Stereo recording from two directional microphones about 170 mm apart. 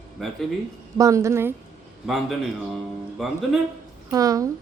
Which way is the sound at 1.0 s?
20° right (ahead or behind).